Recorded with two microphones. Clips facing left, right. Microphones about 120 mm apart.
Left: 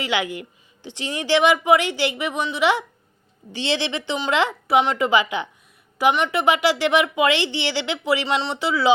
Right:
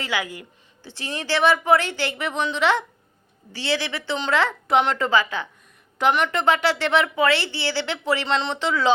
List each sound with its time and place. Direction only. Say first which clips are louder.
0.0 s speech: left 3 dB; 20° left (ahead or behind)
3.5 s speech: left 2 dB; 20° left (ahead or behind)
6.0 s speech: left 1 dB; 5° left (ahead or behind)